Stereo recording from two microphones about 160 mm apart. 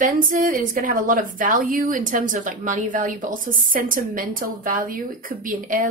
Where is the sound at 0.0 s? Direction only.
55° right (ahead or behind).